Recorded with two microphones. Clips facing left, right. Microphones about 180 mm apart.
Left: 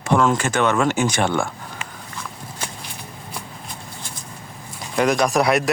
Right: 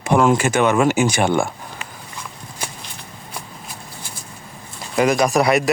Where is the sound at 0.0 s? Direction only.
10° right (ahead or behind).